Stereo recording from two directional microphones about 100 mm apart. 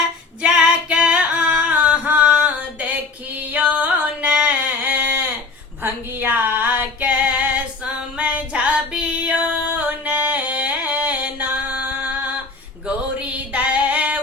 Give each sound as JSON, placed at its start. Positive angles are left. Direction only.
{"t": 0.4, "sound": "singing", "side_deg": -10}
{"t": 3.5, "sound": "a sound", "side_deg": -15}
{"t": 5.8, "sound": "female singing", "side_deg": -20}
{"t": 8.2, "sound": "music", "side_deg": -15}
{"t": 13.1, "sound": "female singing", "side_deg": -15}